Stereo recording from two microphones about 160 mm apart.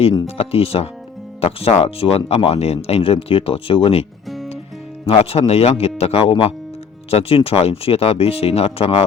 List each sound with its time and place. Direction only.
0.0 s speech: 25° left (ahead or behind)
0.3 s speech: 40° left (ahead or behind)
5.0 s speech: 40° left (ahead or behind)